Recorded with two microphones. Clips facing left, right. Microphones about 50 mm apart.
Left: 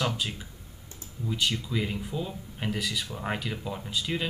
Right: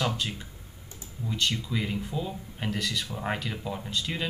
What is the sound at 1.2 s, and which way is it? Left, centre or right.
Speech, centre.